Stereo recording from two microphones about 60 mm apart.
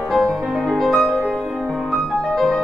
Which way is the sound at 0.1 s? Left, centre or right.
Centre.